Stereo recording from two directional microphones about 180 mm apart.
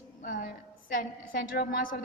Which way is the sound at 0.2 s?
50° left (ahead or behind).